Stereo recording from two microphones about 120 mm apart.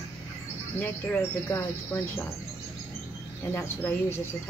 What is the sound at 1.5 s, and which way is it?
Speech, 20° left (ahead or behind).